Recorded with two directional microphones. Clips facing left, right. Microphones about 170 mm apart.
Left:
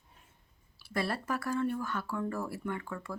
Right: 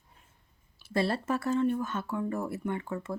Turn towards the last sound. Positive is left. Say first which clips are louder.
# right 4 dB
turn(degrees=-25)  # may be behind; listen again after turning